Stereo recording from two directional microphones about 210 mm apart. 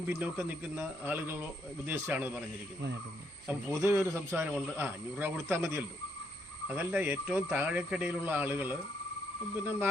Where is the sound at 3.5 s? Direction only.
10° right (ahead or behind).